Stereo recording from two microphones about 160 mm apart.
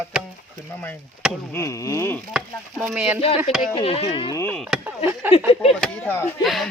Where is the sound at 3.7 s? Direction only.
35° left (ahead or behind).